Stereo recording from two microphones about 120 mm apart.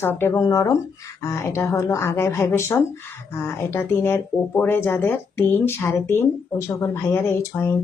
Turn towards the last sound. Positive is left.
turn(degrees=20)  # may be behind; listen again after turning